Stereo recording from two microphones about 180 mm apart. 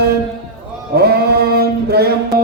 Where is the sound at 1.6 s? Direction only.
60° right (ahead or behind).